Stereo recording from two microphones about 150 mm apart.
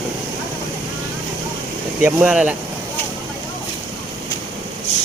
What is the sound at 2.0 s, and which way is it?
Speech, 10° right (ahead or behind).